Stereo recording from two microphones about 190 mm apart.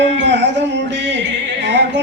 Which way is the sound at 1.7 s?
65° right (ahead or behind).